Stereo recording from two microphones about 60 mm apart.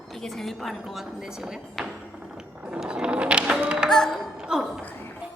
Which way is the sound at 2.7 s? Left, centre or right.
Centre.